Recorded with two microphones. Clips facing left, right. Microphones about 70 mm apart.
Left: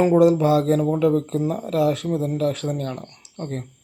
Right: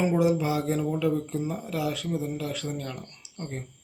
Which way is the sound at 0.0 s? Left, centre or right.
Left.